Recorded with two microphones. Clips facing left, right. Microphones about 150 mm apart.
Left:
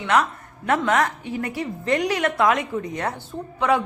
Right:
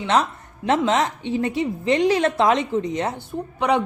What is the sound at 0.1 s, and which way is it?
A woman's voice, 25° right (ahead or behind).